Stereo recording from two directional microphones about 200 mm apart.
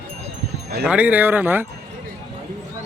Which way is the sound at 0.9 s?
5° right (ahead or behind).